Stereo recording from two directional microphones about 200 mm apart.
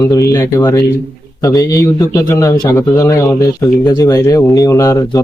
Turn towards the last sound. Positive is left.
turn(degrees=15)  # may be behind; listen again after turning